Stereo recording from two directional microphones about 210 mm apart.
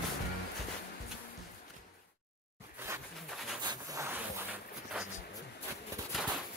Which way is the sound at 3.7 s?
15° right (ahead or behind).